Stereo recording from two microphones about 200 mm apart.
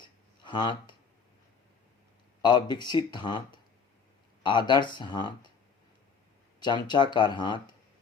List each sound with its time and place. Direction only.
0.4 s speech: 25° left (ahead or behind)
2.4 s speech: 20° left (ahead or behind)
6.6 s speech: 20° left (ahead or behind)